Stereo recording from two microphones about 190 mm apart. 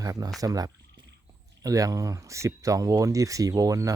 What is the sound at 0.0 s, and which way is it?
Speech, 20° right (ahead or behind).